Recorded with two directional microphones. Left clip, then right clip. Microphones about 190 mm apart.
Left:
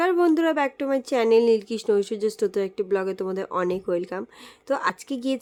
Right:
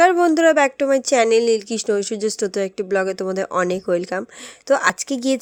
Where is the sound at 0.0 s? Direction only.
20° right (ahead or behind).